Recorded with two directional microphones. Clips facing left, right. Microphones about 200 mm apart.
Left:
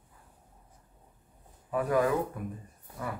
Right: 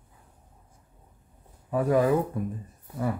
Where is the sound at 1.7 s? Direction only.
25° right (ahead or behind).